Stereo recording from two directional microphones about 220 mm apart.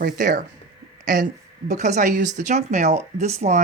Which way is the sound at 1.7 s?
35° right (ahead or behind).